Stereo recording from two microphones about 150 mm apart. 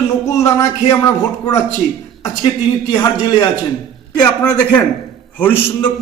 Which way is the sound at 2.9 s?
30° left (ahead or behind).